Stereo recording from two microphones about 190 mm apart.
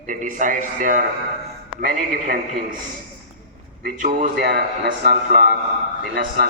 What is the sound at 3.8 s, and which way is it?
Speech, 50° right (ahead or behind).